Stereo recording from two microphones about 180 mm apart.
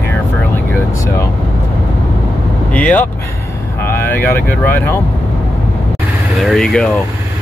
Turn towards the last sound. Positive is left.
turn(degrees=5)  # may be behind; listen again after turning